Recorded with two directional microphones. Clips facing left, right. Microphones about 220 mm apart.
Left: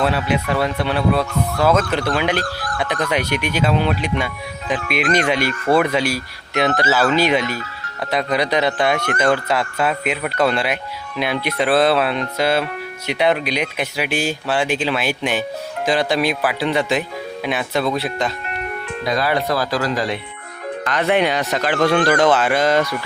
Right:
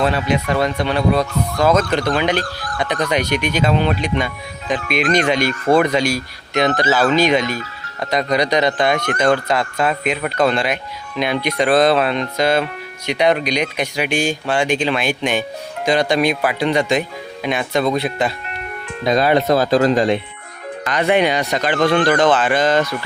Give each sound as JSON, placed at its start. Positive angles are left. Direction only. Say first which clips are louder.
{"t": 0.0, "sound": "speech", "louder": "right 1 dB", "side_deg": 5}
{"t": 19.0, "sound": "speech", "louder": "right 5 dB", "side_deg": -20}
{"t": 21.1, "sound": "speech", "louder": "right 2 dB", "side_deg": 0}